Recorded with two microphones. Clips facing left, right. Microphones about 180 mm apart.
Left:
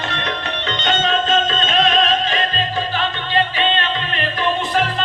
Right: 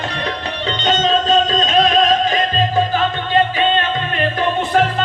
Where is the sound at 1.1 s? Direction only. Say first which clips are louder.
Right 4 dB; 35° right (ahead or behind).